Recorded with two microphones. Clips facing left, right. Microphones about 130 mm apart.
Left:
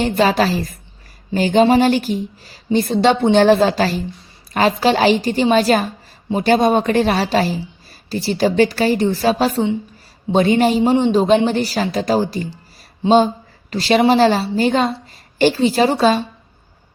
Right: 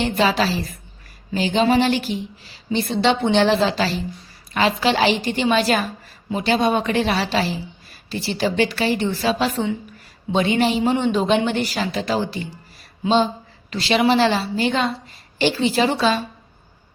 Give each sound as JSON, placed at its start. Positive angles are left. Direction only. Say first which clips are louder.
{"t": 0.0, "sound": "a woman's voice", "louder": "left 4 dB", "side_deg": 45}